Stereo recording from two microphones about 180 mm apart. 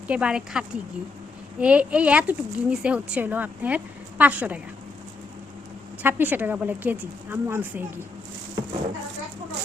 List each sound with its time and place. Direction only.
0.1 s speech: 5° right (ahead or behind)
6.0 s speech: 10° right (ahead or behind)